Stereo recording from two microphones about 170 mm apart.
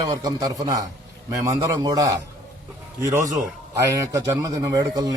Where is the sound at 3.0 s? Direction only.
20° right (ahead or behind).